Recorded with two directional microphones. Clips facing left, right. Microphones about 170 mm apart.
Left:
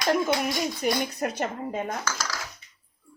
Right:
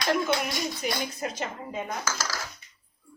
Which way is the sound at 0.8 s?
45° left (ahead or behind).